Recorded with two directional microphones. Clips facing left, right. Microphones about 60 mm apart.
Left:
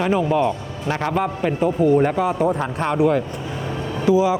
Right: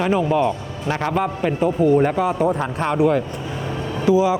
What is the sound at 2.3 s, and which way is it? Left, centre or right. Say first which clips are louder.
Speech: even; right.